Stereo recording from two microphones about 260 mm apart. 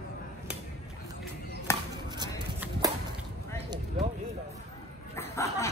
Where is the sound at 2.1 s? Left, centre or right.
Centre.